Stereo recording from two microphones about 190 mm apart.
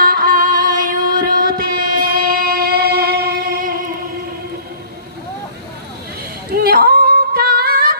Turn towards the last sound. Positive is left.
turn(degrees=-50)  # may be behind; listen again after turning